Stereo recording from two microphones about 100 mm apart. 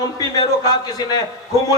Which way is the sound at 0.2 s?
40° left (ahead or behind).